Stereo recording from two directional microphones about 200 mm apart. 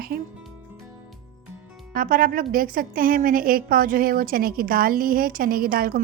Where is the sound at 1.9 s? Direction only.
45° right (ahead or behind).